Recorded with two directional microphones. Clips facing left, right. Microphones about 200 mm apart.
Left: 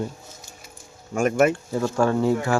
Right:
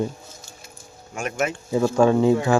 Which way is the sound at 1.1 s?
50° left (ahead or behind).